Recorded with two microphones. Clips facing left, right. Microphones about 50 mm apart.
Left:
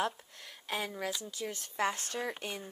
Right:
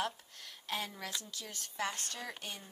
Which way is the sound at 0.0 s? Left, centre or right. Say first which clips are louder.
Left 4 dB; left.